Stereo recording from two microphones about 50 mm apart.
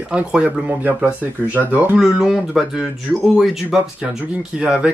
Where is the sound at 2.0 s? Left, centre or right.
Centre.